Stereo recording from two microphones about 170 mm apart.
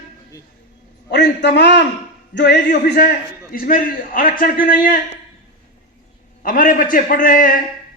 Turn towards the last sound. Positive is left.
turn(degrees=50)  # may be behind; listen again after turning